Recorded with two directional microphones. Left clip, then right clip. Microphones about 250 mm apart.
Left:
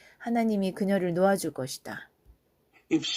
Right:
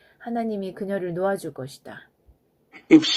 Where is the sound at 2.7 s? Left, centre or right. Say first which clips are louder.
Right 13 dB; right.